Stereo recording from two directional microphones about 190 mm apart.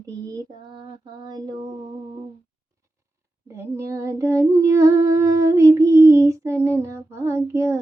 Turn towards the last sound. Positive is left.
turn(degrees=-15)  # may be behind; listen again after turning